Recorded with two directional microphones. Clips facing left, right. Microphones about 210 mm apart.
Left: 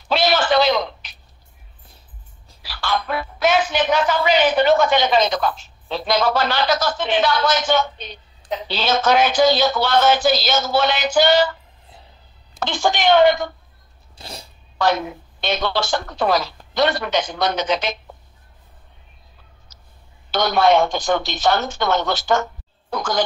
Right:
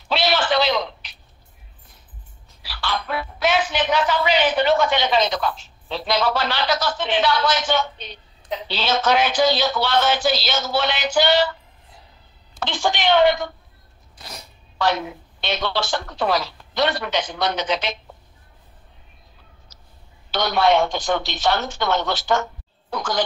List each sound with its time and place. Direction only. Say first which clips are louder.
0.1 s a sound: left 3 dB; 45° left (ahead or behind)
2.6 s speech: left 3 dB; 45° left (ahead or behind)
12.5 s speech: left 3 dB; 45° left (ahead or behind)
14.1 s a sound: left 3 dB; 30° left (ahead or behind)
14.8 s speech: left 2 dB; 45° left (ahead or behind)
20.2 s speech: left 2 dB; 45° left (ahead or behind)